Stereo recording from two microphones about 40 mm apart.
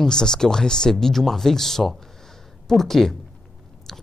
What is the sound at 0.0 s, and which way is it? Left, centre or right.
Speech, centre.